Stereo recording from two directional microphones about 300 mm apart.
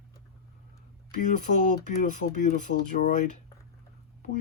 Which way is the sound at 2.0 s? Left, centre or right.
Left.